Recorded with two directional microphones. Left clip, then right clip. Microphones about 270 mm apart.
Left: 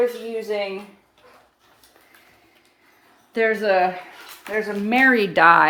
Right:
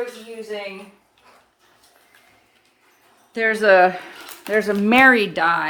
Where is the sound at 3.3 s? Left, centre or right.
Centre.